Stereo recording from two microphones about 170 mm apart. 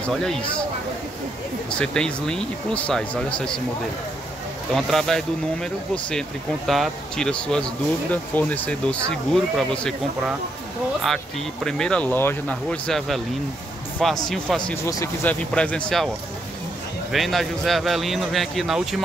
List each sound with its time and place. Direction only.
0.0 s speech: 5° left (ahead or behind)
1.7 s speech: 5° left (ahead or behind)
4.7 s speech: centre (ahead or behind)
11.6 s speech: 5° left (ahead or behind)
14.2 s speech: centre (ahead or behind)
14.9 s speech: 20° left (ahead or behind)
15.5 s speech: 5° left (ahead or behind)
17.1 s speech: centre (ahead or behind)